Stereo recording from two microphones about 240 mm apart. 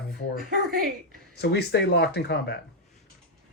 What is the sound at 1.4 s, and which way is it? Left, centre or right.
Speech, left.